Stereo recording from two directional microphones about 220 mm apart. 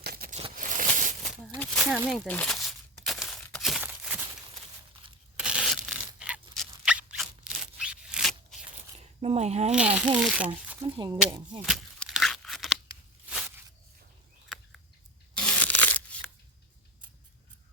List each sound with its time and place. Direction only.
0.0 s a sound: 45° right (ahead or behind)
1.5 s a sound: centre (ahead or behind)
2.2 s crumpling: 5° left (ahead or behind)
5.4 s tearing: 5° right (ahead or behind)
6.6 s a sound: 5° right (ahead or behind)
9.2 s speech: 30° right (ahead or behind)
9.7 s speech: 5° right (ahead or behind)
10.8 s speech: 20° right (ahead or behind)
11.6 s tearing: centre (ahead or behind)
15.4 s tearing: 5° left (ahead or behind)